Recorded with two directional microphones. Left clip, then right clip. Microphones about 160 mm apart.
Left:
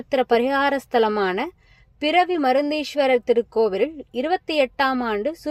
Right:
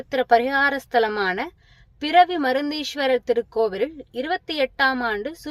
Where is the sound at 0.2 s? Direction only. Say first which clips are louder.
Right 2 dB; 20° left (ahead or behind).